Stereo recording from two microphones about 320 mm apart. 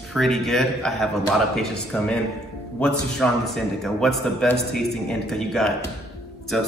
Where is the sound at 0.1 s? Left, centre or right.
Centre.